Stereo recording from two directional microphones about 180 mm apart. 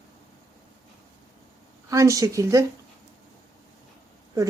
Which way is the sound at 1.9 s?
20° right (ahead or behind).